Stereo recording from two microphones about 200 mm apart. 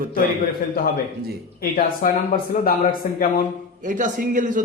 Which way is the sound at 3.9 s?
40° right (ahead or behind).